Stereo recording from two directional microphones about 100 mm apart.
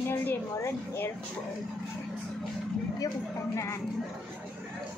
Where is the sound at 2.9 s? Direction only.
35° left (ahead or behind).